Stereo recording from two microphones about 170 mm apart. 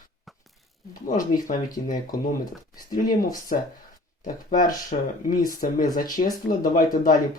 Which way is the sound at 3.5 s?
45° left (ahead or behind).